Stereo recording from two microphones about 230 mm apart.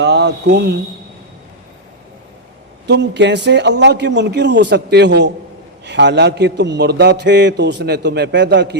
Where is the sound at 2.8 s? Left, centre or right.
Right.